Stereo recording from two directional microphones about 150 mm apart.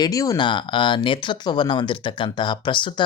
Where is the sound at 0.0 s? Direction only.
25° left (ahead or behind).